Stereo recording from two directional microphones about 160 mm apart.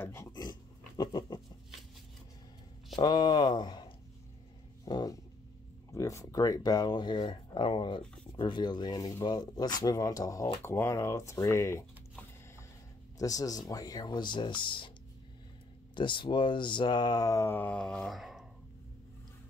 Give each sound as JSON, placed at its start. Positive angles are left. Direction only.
{"t": 0.0, "sound": "pig", "side_deg": 15}
{"t": 3.0, "sound": "speech", "side_deg": 25}
{"t": 4.8, "sound": "a sound", "side_deg": 25}
{"t": 5.9, "sound": "speech", "side_deg": 20}
{"t": 13.2, "sound": "speech", "side_deg": 20}
{"t": 16.0, "sound": "speech", "side_deg": 30}